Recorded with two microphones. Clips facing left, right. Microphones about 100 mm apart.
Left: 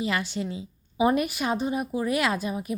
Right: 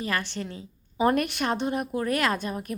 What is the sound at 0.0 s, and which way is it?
Speech, 15° left (ahead or behind).